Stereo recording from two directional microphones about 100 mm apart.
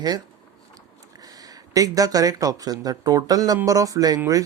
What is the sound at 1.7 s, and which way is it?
Speech, 35° right (ahead or behind).